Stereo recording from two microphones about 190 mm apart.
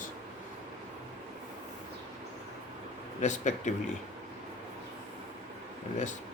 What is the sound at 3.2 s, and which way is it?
Speech, 40° left (ahead or behind).